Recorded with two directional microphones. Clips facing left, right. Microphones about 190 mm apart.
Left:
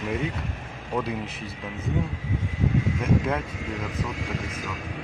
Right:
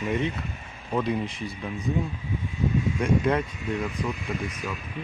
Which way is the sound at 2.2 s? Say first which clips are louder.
Left 1 dB; 90° left.